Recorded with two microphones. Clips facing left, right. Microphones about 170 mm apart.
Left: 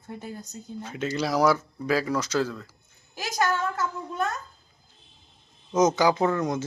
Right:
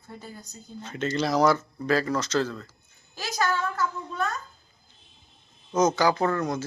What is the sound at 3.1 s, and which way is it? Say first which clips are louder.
Speech: left 1 dB; 20° left (ahead or behind).